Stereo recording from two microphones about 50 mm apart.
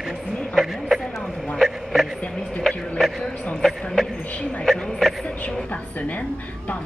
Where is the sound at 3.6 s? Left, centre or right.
Centre.